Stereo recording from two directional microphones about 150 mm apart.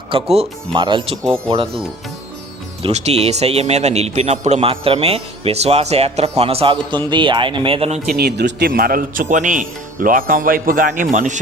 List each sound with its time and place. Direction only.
0.1 s speech: 40° right (ahead or behind)
2.8 s a man's voice: 45° right (ahead or behind)
8.0 s speech: 90° right; by 11.3 s 60° right (ahead or behind)